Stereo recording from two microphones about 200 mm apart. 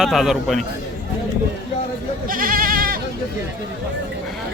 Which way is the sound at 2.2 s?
45° right (ahead or behind).